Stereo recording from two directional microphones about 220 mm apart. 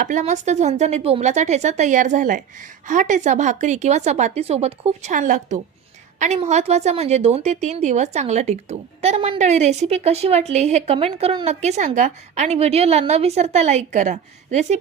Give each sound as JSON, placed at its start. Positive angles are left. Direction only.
{"t": 0.0, "sound": "a woman's voice", "side_deg": -35}